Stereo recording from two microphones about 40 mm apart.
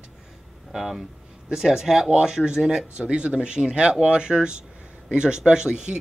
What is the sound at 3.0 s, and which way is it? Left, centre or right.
Speech, right.